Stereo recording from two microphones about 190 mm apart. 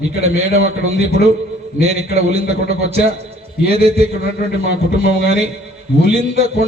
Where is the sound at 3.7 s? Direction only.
30° right (ahead or behind).